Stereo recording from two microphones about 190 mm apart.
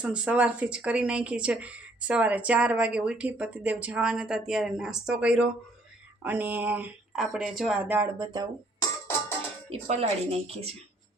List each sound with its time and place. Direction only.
0.0 s speech: 5° right (ahead or behind)
9.7 s speech: 30° right (ahead or behind)